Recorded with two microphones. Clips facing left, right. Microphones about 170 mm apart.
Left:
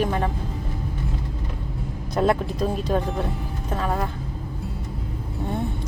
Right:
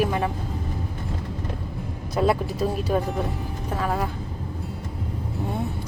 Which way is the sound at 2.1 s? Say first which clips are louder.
Left 1 dB; 5° right (ahead or behind).